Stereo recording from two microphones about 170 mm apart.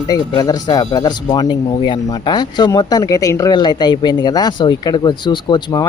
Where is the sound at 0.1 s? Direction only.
25° left (ahead or behind).